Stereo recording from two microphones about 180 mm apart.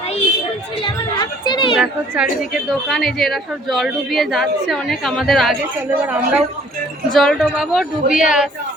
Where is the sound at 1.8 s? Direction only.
5° right (ahead or behind).